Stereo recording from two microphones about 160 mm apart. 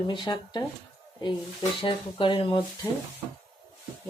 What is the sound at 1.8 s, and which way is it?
Speech, 30° left (ahead or behind).